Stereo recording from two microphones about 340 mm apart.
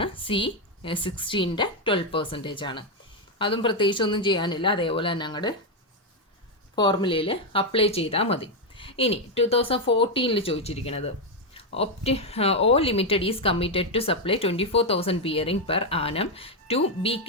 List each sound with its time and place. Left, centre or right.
0.0 s a woman's voice: centre
6.7 s a woman's voice: centre